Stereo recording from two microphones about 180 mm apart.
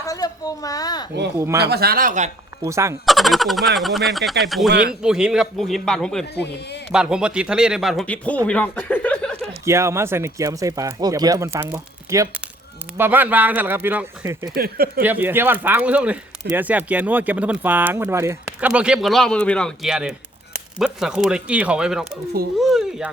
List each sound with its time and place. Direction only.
0.0 s a child's voice: 20° left (ahead or behind)
1.7 s speech: 60° right (ahead or behind)
2.6 s speech: 15° right (ahead or behind)
3.1 s speech: centre (ahead or behind)
9.6 s speech: 15° right (ahead or behind)
14.5 s speech: 55° right (ahead or behind)
15.0 s speech: 10° right (ahead or behind)